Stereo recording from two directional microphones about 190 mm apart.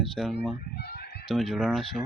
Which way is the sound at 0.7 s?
55° left (ahead or behind).